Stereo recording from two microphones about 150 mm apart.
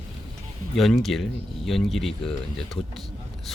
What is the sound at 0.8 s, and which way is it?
Speech, centre (ahead or behind).